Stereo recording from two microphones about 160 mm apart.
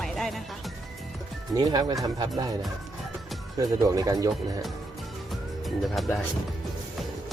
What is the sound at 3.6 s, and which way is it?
Speech, 20° right (ahead or behind).